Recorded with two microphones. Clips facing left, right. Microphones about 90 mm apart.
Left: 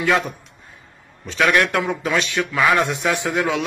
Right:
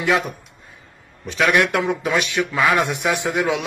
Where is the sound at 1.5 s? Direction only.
20° right (ahead or behind).